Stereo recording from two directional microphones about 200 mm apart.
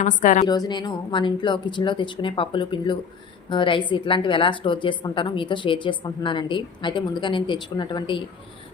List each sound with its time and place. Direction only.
0.0 s a woman's voice: 35° left (ahead or behind)
0.4 s a woman's voice: 20° left (ahead or behind)